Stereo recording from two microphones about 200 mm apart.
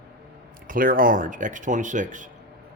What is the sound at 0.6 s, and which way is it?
Speech, 45° right (ahead or behind).